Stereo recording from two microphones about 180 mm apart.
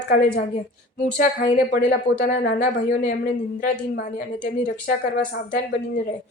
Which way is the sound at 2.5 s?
45° left (ahead or behind).